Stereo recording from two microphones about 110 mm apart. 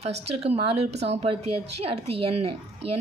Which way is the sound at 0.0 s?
70° right (ahead or behind).